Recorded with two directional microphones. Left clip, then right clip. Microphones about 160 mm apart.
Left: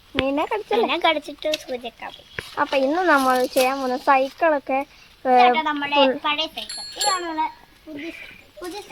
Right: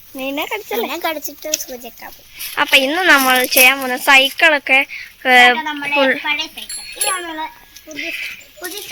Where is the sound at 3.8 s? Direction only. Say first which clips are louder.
Right 7 dB; 20° right (ahead or behind).